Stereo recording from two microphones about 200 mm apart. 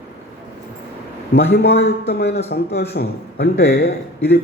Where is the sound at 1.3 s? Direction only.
55° left (ahead or behind).